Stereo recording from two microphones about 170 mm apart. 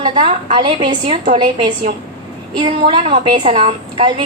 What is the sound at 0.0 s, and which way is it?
A woman's voice, 30° right (ahead or behind).